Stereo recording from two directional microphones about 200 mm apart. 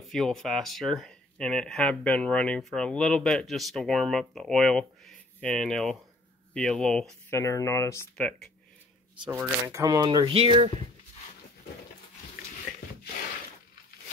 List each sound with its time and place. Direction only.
0.1 s speech: centre (ahead or behind)
7.2 s speech: 15° left (ahead or behind)
9.2 s speech: 10° right (ahead or behind); by 10.7 s 30° right (ahead or behind)